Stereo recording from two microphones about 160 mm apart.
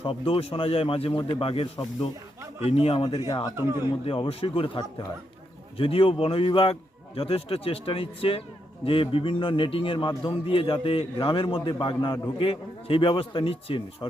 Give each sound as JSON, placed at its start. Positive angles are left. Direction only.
{"t": 0.0, "sound": "a man's voice", "side_deg": 35}
{"t": 3.2, "sound": "speech", "side_deg": 25}
{"t": 4.0, "sound": "a man's voice", "side_deg": 35}